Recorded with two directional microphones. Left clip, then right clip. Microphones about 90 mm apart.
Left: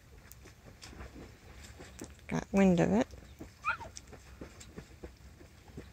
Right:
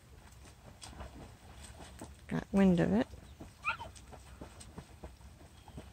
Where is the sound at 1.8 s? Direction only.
15° right (ahead or behind).